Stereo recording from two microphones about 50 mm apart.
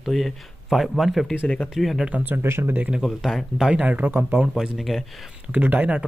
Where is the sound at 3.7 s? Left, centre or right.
Right.